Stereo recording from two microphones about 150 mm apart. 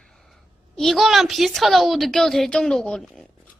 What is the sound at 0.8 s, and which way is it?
A child's voice, centre (ahead or behind).